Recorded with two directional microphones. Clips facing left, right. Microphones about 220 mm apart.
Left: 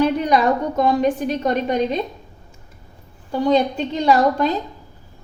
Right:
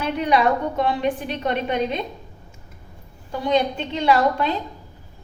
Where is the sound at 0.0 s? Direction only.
40° left (ahead or behind).